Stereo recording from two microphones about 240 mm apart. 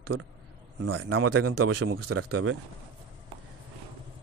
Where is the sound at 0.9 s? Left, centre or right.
Right.